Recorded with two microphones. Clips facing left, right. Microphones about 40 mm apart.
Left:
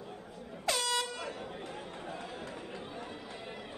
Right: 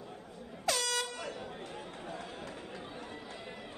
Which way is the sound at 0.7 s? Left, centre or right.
Left.